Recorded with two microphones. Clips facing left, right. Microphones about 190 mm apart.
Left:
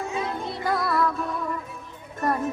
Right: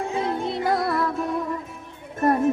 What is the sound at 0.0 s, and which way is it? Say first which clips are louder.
Music: right 4 dB; 25° right (ahead or behind).